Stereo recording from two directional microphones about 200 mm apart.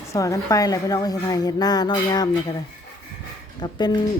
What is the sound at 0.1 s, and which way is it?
A woman's voice, 15° left (ahead or behind).